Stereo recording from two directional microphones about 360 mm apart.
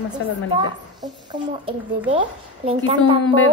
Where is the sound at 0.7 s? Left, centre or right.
Centre.